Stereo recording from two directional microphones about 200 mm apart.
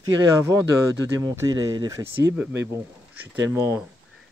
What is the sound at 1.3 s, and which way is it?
Speech, 15° right (ahead or behind).